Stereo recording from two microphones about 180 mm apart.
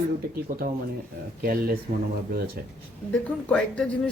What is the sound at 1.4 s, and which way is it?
Speech, 55° right (ahead or behind).